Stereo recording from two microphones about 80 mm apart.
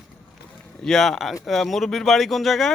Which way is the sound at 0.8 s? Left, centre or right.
Centre.